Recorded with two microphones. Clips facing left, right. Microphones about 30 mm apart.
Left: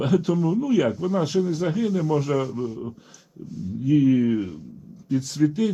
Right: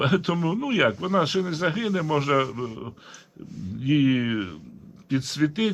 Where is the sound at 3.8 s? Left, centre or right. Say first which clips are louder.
Left 3 dB; right.